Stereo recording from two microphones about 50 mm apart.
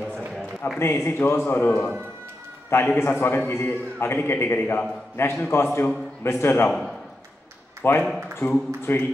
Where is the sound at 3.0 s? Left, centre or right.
Left.